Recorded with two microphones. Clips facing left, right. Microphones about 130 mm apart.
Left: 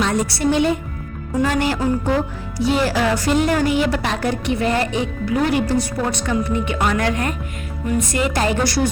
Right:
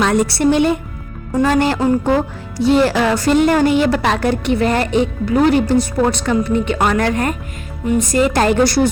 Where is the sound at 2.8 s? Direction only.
60° right (ahead or behind).